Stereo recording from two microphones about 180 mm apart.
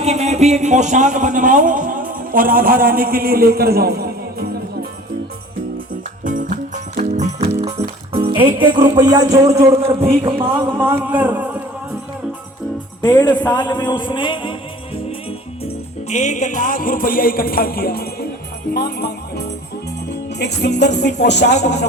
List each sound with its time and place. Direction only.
0.0 s a man's voice: 35° right (ahead or behind); by 4.4 s 60° right (ahead or behind)
6.2 s music: 45° right (ahead or behind)
8.1 s speech: 30° right (ahead or behind)
10.7 s speech: 10° right (ahead or behind)
13.5 s a man's voice: 25° left (ahead or behind)
15.6 s music: 40° left (ahead or behind); by 18.3 s 55° left (ahead or behind)
18.7 s speech: 60° left (ahead or behind)
20.4 s music: 70° left (ahead or behind)